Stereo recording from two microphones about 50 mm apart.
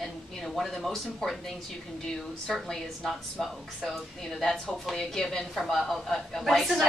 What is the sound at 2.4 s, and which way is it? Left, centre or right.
A woman's voice, centre.